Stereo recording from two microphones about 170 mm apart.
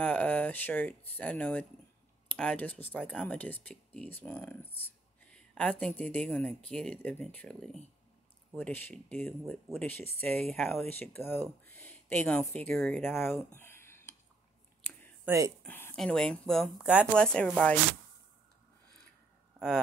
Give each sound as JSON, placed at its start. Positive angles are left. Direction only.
{"t": 0.0, "sound": "speech", "side_deg": 5}
{"t": 13.6, "sound": "a sound", "side_deg": 15}
{"t": 15.2, "sound": "speech", "side_deg": -15}
{"t": 15.6, "sound": "speech", "side_deg": 10}
{"t": 17.1, "sound": "speech", "side_deg": 5}